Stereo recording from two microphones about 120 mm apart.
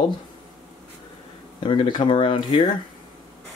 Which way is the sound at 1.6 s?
45° left (ahead or behind).